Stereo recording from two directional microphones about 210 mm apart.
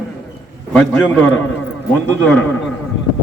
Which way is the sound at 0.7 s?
5° left (ahead or behind).